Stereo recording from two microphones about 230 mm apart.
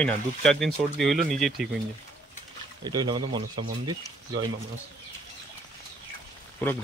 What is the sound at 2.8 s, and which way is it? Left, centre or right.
Speech, centre.